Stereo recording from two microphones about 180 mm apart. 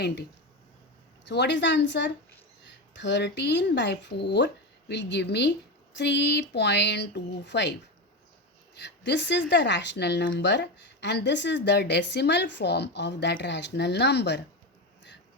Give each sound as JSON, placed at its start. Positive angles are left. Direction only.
{"t": 1.2, "sound": "a woman's voice", "side_deg": 75}
{"t": 8.8, "sound": "a woman's voice", "side_deg": 80}